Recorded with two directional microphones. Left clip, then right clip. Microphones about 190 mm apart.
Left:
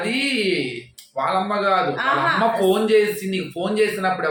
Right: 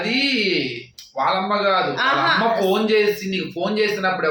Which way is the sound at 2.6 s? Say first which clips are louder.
Left 1 dB; 5° left (ahead or behind).